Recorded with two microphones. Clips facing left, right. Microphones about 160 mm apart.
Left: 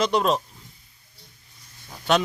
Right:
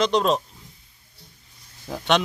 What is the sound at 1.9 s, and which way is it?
Speech, 90° right.